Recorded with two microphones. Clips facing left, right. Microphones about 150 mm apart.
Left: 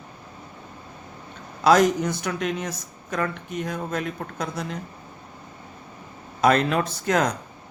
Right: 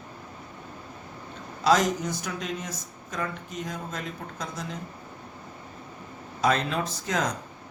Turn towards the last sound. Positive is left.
turn(degrees=60)  # may be behind; listen again after turning